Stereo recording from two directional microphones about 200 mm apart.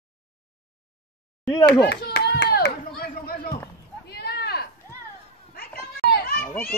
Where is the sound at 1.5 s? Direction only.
20° left (ahead or behind).